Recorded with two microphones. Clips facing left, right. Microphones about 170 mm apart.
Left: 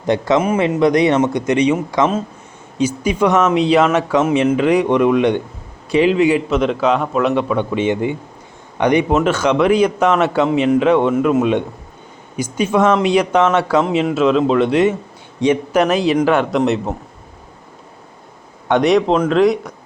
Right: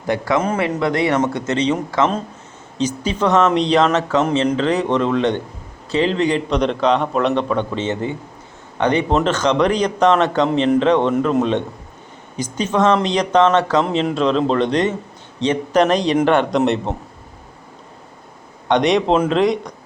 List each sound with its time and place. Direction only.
0.0 s a man's voice: 20° left (ahead or behind)
0.3 s a man's voice: 10° left (ahead or behind)
18.7 s a man's voice: centre (ahead or behind)